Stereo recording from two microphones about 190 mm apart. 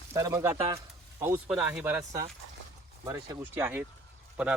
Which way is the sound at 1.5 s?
5° right (ahead or behind).